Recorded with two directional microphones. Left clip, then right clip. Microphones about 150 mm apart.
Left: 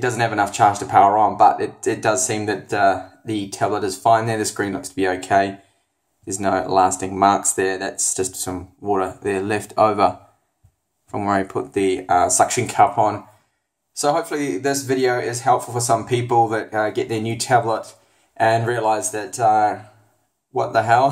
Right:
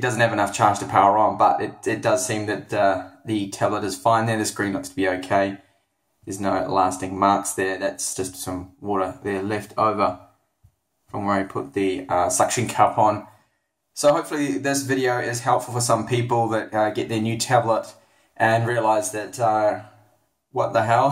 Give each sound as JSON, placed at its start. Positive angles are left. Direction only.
{"t": 0.0, "sound": "speech", "side_deg": 25}